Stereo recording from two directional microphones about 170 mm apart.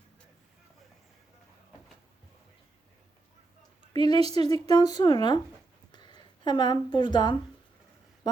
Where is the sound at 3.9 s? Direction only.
25° left (ahead or behind).